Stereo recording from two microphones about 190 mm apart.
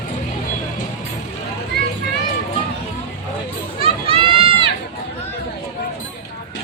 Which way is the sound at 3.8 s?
30° right (ahead or behind).